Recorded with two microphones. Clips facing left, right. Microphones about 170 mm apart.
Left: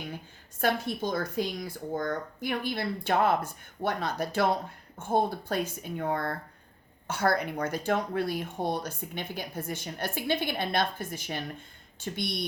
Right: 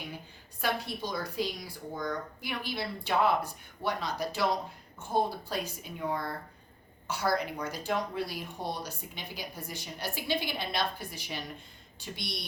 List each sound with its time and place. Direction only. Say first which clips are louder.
0.6 s speech: left 5 dB; 50° left (ahead or behind)